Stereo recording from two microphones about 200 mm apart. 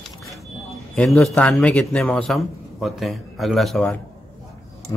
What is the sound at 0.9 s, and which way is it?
A man's voice, centre (ahead or behind).